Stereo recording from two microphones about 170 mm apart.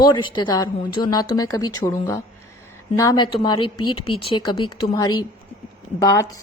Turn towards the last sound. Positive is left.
turn(degrees=20)  # may be behind; listen again after turning